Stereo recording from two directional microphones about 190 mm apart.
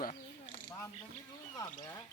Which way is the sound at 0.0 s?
45° left (ahead or behind).